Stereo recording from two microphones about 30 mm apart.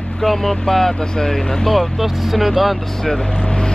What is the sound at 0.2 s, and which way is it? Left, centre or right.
Speech, centre.